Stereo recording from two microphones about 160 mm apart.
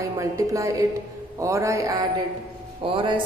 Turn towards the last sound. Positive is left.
turn(degrees=-35)  # may be behind; listen again after turning